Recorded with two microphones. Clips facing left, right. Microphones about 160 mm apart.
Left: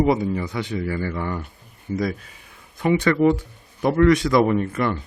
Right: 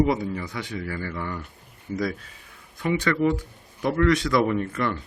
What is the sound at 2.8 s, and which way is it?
Speech, 25° left (ahead or behind).